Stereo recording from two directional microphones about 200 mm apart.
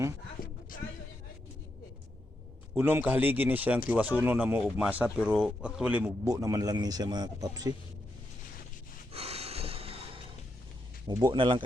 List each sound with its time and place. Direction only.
0.4 s a sound: 45° left (ahead or behind)
2.7 s speech: 10° right (ahead or behind)
6.1 s speech: 15° right (ahead or behind)
9.1 s snort: 30° right (ahead or behind)
11.1 s speech: 20° right (ahead or behind)